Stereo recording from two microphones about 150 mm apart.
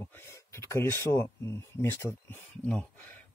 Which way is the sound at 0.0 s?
15° left (ahead or behind).